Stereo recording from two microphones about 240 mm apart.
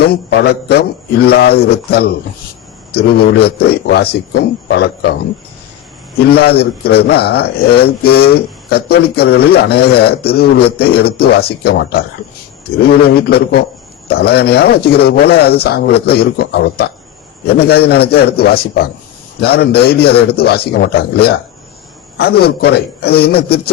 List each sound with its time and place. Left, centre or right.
0.0 s a man's voice: left
6.2 s a man's voice: left